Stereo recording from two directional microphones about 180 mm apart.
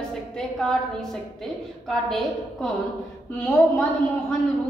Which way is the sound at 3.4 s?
10° left (ahead or behind).